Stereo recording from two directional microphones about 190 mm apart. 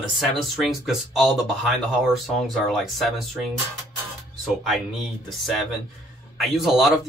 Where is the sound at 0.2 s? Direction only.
Centre (ahead or behind).